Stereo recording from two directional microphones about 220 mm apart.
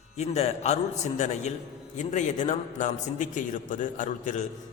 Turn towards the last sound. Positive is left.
turn(degrees=35)  # may be behind; listen again after turning